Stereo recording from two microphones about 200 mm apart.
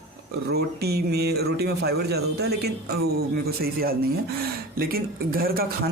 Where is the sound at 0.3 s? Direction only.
50° right (ahead or behind).